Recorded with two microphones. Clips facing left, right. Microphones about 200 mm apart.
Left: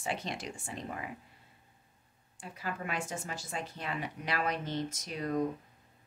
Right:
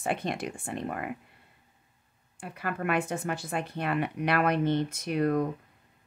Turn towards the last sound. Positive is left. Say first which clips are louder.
# right 8 dB
turn(degrees=-60)  # may be behind; listen again after turning